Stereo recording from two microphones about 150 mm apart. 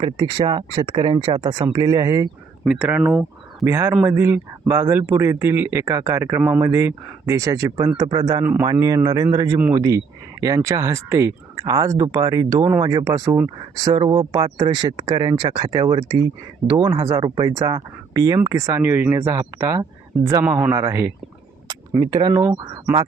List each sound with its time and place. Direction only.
0.0 s speech: 30° right (ahead or behind)
2.6 s speech: 5° right (ahead or behind)
3.6 s speech: 15° right (ahead or behind)
13.9 s speech: 35° right (ahead or behind)
14.2 s speech: 25° right (ahead or behind)
16.7 s speech: 40° right (ahead or behind)
17.0 s speech: 25° right (ahead or behind)
21.7 s a sound: 25° right (ahead or behind)